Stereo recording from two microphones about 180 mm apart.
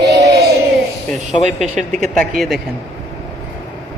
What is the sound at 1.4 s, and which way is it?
Speech, 40° right (ahead or behind).